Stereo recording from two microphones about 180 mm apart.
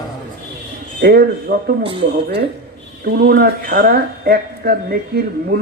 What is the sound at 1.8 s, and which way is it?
Speech, 30° right (ahead or behind).